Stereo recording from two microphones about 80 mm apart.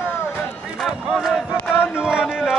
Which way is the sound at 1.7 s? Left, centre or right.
Centre.